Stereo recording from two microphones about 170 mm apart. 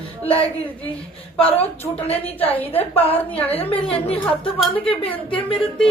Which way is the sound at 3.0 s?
10° left (ahead or behind).